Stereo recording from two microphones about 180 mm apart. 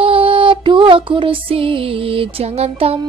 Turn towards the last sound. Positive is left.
turn(degrees=-35)  # may be behind; listen again after turning